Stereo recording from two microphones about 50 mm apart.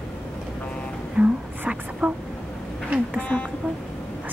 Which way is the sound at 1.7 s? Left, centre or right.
Right.